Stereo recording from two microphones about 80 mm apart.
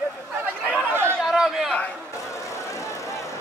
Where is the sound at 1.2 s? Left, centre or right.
Centre.